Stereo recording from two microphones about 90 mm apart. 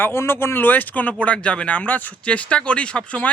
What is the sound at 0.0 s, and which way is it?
Speech, 25° left (ahead or behind).